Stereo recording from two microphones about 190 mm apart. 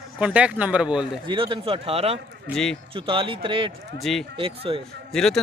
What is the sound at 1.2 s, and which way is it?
Speech, 25° right (ahead or behind).